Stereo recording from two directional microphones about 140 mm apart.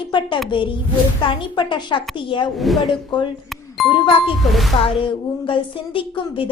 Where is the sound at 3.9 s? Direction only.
35° left (ahead or behind).